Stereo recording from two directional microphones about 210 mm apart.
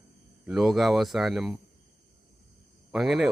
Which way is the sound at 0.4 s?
Centre (ahead or behind).